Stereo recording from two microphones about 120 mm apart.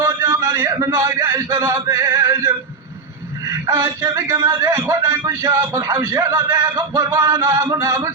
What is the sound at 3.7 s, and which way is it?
Speech, 25° right (ahead or behind).